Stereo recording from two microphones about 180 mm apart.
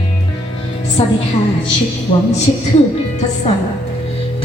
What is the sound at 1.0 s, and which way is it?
Speech, 35° left (ahead or behind).